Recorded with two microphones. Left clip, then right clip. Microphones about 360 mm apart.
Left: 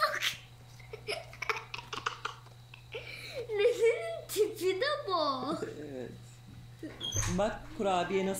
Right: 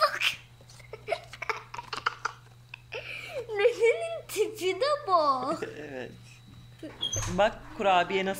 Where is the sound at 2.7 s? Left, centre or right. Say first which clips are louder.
Right 5 dB; centre.